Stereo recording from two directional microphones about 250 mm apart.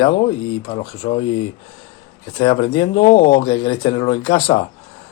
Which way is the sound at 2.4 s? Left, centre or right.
Centre.